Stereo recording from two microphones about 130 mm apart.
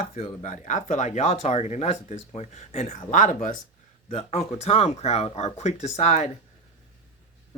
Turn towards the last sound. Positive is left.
turn(degrees=60)  # may be behind; listen again after turning